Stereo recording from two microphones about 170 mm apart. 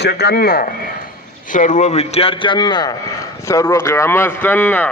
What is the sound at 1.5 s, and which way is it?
A man's voice, 50° left (ahead or behind).